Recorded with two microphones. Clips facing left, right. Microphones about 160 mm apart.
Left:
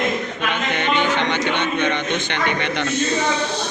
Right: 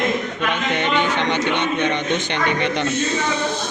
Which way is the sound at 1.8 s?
40° right (ahead or behind).